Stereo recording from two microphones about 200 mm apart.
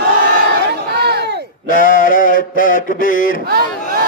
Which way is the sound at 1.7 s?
45° left (ahead or behind).